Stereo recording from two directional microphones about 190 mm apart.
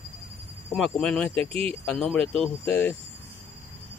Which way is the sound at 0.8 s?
5° left (ahead or behind).